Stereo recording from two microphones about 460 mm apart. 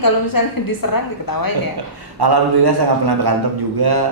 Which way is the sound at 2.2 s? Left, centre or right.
Right.